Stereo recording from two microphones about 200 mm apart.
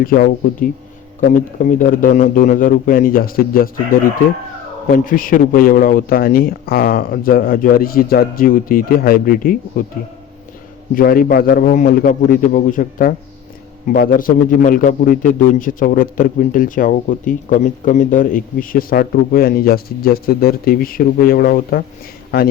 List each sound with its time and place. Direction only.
0.0 s a man's voice: 45° left (ahead or behind)
10.9 s a man's voice: 45° left (ahead or behind)